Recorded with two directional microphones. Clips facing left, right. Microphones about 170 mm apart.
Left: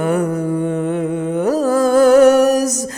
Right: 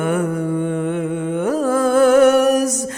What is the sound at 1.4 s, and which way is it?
Music, 40° left (ahead or behind).